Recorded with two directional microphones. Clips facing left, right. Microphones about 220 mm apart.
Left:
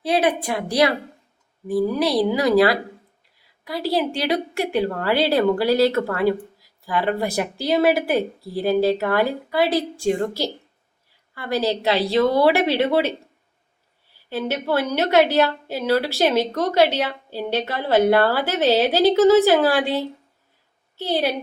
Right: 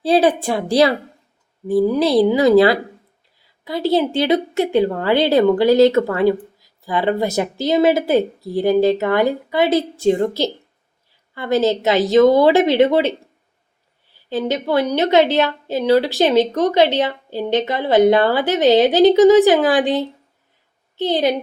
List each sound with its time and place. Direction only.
0.0 s speech: 30° right (ahead or behind)
14.3 s a woman's voice: 15° right (ahead or behind)